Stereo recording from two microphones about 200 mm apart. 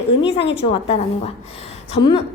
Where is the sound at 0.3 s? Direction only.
25° left (ahead or behind).